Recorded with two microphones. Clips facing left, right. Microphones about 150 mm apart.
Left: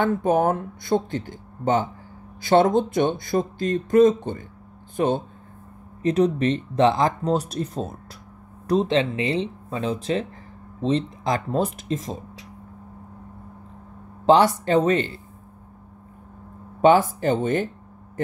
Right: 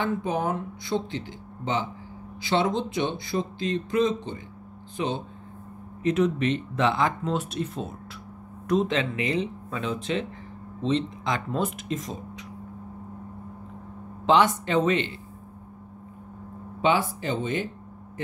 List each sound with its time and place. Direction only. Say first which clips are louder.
0.0 s speech: left 7 dB; 50° left (ahead or behind)
6.0 s speech: left 3 dB; 35° left (ahead or behind)
14.2 s speech: left 4 dB; 35° left (ahead or behind)
16.8 s speech: left 7 dB; 45° left (ahead or behind)